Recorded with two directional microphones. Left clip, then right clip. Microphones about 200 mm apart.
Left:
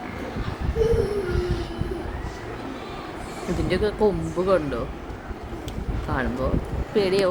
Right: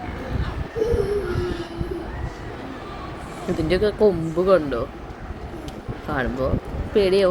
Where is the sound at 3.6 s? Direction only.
10° right (ahead or behind).